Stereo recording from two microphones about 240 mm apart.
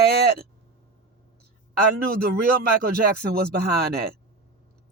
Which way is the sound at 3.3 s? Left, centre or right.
Right.